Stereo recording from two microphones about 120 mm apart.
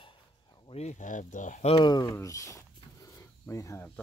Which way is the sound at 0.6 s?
65° left (ahead or behind).